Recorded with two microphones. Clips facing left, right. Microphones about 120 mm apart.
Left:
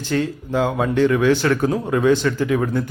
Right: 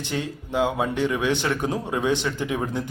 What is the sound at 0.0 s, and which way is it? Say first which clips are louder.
Speech: left 7 dB; 15° right (ahead or behind).